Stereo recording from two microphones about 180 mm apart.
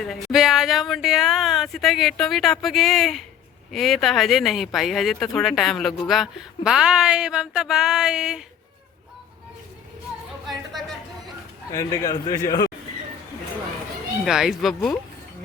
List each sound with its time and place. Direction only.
0.0 s speech: centre (ahead or behind)
10.7 s chatter: centre (ahead or behind)
11.7 s a man's voice: 20° left (ahead or behind)
14.3 s speech: centre (ahead or behind)